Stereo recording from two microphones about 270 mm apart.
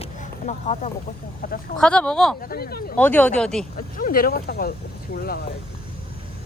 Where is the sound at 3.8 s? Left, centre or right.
Left.